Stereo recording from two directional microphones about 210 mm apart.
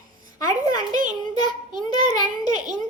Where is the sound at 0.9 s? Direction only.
40° right (ahead or behind).